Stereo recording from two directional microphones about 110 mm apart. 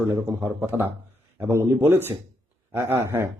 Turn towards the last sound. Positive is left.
turn(degrees=-20)  # may be behind; listen again after turning